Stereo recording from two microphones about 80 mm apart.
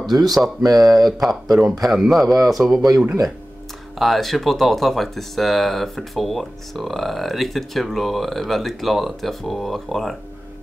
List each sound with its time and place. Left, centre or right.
0.3 s speech: centre
0.7 s speech: right
0.9 s speech: centre
4.0 s speech: centre